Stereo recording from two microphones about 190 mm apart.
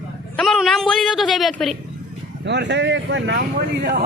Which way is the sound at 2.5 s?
65° right (ahead or behind).